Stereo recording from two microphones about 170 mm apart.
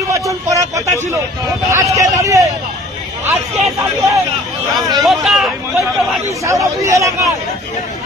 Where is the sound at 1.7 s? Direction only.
20° right (ahead or behind).